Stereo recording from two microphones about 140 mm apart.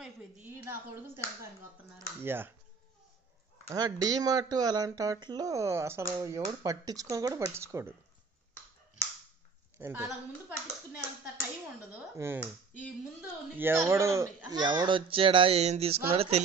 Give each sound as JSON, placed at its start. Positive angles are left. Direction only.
{"t": 0.0, "sound": "speech", "side_deg": -15}
{"t": 3.6, "sound": "speech", "side_deg": -25}
{"t": 9.8, "sound": "a woman's voice", "side_deg": -15}
{"t": 11.9, "sound": "speech", "side_deg": -15}
{"t": 13.6, "sound": "speech", "side_deg": -15}
{"t": 14.6, "sound": "speech", "side_deg": -35}